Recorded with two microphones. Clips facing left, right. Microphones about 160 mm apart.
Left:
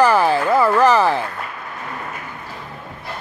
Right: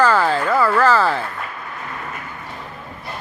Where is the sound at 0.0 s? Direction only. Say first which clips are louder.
Left 2 dB; 15° left (ahead or behind).